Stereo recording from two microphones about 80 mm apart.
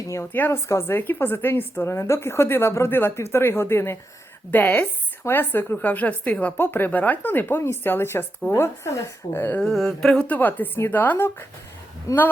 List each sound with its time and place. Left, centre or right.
0.1 s a woman's voice: left
4.5 s a woman's voice: left
9.6 s a sound: centre
10.2 s speech: left
12.1 s a woman's voice: left